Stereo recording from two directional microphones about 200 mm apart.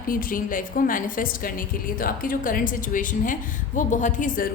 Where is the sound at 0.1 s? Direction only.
45° left (ahead or behind).